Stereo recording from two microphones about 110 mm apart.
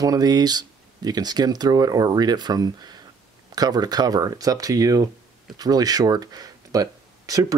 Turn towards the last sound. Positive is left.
turn(degrees=-35)  # may be behind; listen again after turning